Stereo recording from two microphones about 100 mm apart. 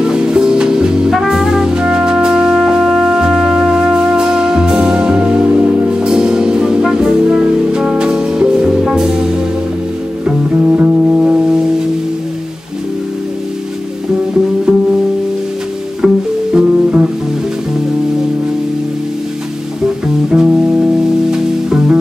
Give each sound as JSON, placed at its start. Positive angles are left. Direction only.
{"t": 0.0, "sound": "music", "side_deg": -10}
{"t": 10.2, "sound": "double bass", "side_deg": -15}
{"t": 14.7, "sound": "music", "side_deg": -5}
{"t": 16.5, "sound": "music", "side_deg": -10}
{"t": 20.2, "sound": "music", "side_deg": -10}